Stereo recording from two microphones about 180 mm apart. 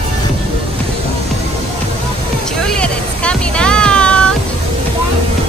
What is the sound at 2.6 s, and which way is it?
Music, 5° left (ahead or behind).